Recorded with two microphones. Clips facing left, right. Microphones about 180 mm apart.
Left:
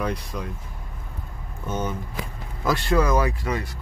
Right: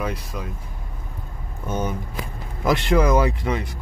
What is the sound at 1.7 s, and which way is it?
Speech, 15° right (ahead or behind).